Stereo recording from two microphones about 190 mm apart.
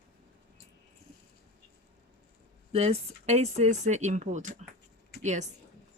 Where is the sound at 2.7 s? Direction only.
30° right (ahead or behind).